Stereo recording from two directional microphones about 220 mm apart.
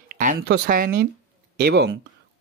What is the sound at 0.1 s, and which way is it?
Speech, 40° right (ahead or behind).